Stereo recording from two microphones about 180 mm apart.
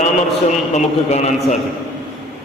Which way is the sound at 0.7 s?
40° left (ahead or behind).